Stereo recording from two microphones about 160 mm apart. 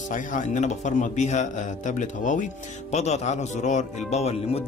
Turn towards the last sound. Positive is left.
turn(degrees=40)  # may be behind; listen again after turning